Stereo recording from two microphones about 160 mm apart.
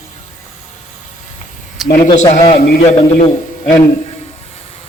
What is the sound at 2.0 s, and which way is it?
A man's voice, 50° left (ahead or behind).